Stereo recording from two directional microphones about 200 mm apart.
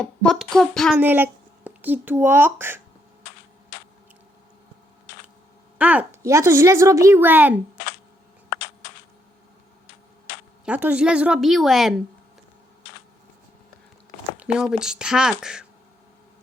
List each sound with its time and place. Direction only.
0.0 s a woman's voice: 5° left (ahead or behind)
0.9 s speech: 10° right (ahead or behind)
5.7 s speech: 10° right (ahead or behind)
8.5 s a sound: 65° left (ahead or behind)
10.7 s a woman's voice: 5° right (ahead or behind)
14.3 s a woman's voice: 5° right (ahead or behind)